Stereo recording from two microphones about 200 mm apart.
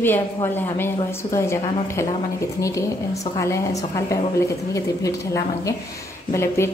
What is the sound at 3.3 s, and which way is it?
A woman's voice, 15° left (ahead or behind).